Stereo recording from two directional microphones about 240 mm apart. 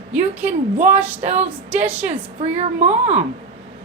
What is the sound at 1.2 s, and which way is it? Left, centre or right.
A woman's voice, right.